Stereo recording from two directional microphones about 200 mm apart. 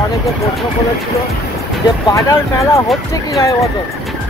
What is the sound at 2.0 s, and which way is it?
Speech, 15° left (ahead or behind).